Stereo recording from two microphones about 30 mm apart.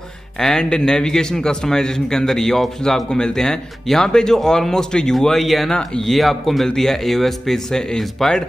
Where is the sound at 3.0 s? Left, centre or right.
Left; by 7.6 s centre.